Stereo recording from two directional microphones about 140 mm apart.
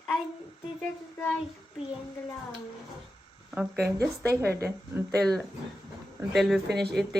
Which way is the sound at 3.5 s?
10° right (ahead or behind).